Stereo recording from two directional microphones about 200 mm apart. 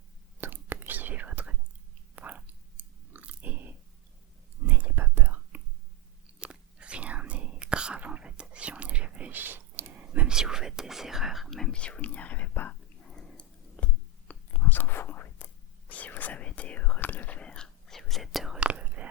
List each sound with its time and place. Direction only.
0.4 s whispering: 10° right (ahead or behind)
2.1 s chewing: 10° right (ahead or behind)
4.6 s whispering: 10° right (ahead or behind); by 12.7 s 10° left (ahead or behind)
13.1 s a sound: 5° left (ahead or behind)
15.9 s whispering: 10° left (ahead or behind)